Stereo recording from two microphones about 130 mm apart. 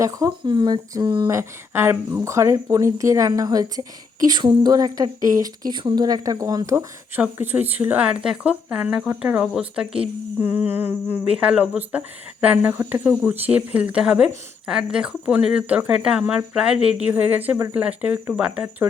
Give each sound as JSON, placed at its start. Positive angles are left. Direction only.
{"t": 0.0, "sound": "speech", "side_deg": -25}
{"t": 1.3, "sound": "speech", "side_deg": -20}
{"t": 6.7, "sound": "speech", "side_deg": -15}
{"t": 10.4, "sound": "speech", "side_deg": -15}